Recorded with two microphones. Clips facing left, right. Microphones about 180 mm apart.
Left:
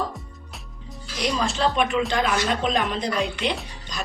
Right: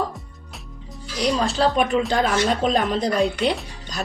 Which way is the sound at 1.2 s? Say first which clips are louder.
Right 3 dB; 35° right (ahead or behind).